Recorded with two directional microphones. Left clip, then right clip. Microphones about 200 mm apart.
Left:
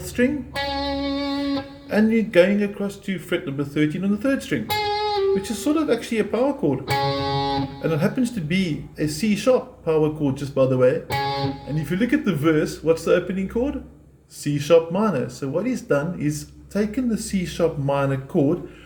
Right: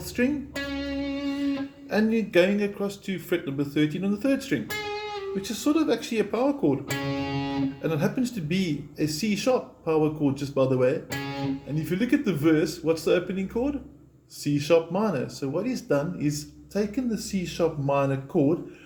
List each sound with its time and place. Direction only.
0.2 s speech: 5° right (ahead or behind)
0.5 s music: 55° left (ahead or behind)
1.9 s speech: 5° right (ahead or behind)
4.8 s guitar: 55° left (ahead or behind)
5.5 s speech: centre (ahead or behind)
6.9 s music: 55° left (ahead or behind)
7.8 s speech: 5° right (ahead or behind)
11.2 s music: 55° left (ahead or behind)
11.9 s speech: 5° right (ahead or behind)